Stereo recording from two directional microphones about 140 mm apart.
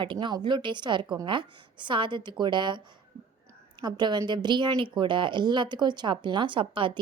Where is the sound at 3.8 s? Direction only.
30° right (ahead or behind).